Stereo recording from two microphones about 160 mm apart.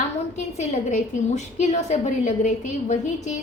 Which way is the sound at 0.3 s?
45° left (ahead or behind).